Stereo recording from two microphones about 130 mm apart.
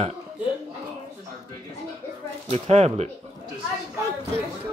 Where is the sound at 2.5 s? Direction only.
55° right (ahead or behind).